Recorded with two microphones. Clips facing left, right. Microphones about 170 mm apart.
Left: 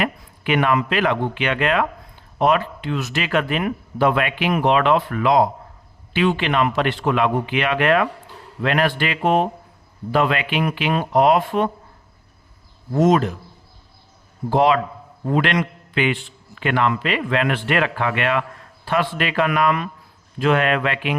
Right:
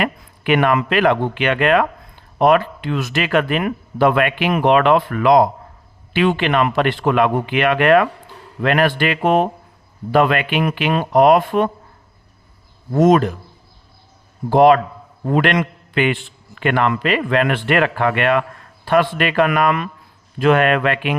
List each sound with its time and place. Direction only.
0.0 s speech: 55° right (ahead or behind)
12.9 s speech: 55° right (ahead or behind)
14.5 s a man's voice: 50° right (ahead or behind)